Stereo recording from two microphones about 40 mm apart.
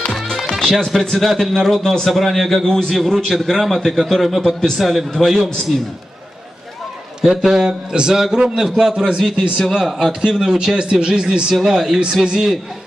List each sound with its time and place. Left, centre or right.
0.1 s music: centre
0.6 s a man's voice: centre
7.2 s a man's voice: centre
7.6 s speech: right
8.1 s a man's voice: centre